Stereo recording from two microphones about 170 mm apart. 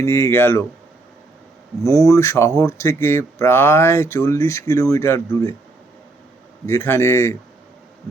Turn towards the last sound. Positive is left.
turn(degrees=15)  # may be behind; listen again after turning